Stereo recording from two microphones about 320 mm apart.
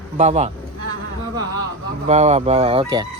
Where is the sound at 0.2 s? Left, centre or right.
Right.